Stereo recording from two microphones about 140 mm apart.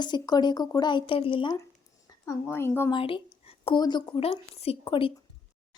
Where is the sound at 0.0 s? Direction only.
30° left (ahead or behind).